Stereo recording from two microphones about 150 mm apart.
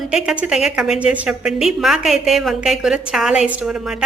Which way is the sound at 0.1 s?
5° right (ahead or behind).